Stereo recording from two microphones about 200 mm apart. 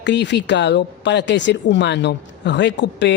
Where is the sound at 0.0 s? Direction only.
60° left (ahead or behind).